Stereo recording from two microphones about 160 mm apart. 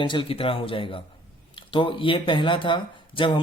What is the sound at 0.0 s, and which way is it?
Speech, 30° left (ahead or behind).